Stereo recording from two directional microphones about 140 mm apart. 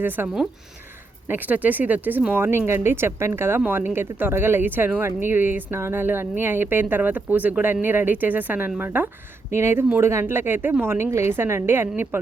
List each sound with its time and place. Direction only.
0.0 s speech: 15° right (ahead or behind)
1.3 s speech: 10° right (ahead or behind)